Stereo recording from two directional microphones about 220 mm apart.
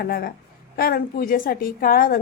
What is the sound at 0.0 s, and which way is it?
A woman's voice, 45° left (ahead or behind).